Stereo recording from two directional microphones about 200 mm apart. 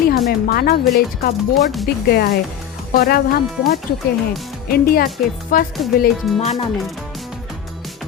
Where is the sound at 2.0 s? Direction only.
50° left (ahead or behind).